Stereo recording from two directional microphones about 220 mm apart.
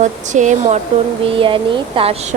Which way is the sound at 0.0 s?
35° right (ahead or behind).